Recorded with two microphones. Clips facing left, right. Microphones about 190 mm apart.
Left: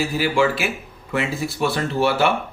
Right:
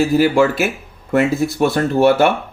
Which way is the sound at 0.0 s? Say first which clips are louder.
Right 6 dB; 45° right (ahead or behind).